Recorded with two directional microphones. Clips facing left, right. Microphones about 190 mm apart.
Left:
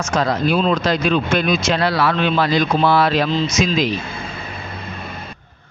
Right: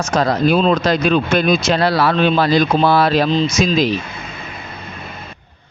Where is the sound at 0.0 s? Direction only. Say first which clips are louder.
Right 3 dB; 40° right (ahead or behind).